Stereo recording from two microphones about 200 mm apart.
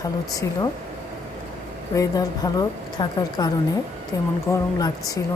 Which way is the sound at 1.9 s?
15° left (ahead or behind).